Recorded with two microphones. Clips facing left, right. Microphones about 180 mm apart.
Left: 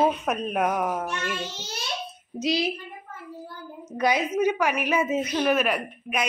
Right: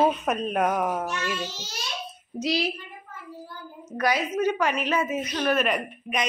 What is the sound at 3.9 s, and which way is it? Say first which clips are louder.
Speech: left 1 dB; 20° left (ahead or behind).